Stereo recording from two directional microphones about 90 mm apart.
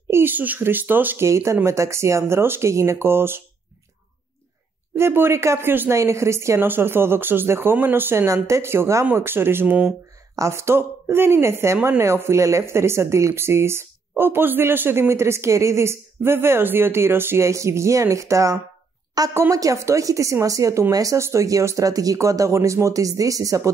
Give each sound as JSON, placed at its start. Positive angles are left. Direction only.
{"t": 0.1, "sound": "a woman's voice", "side_deg": -20}
{"t": 4.9, "sound": "a woman's voice", "side_deg": -25}
{"t": 10.3, "sound": "a woman's voice", "side_deg": -30}